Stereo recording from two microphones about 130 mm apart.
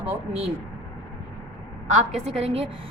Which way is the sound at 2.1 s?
55° right (ahead or behind).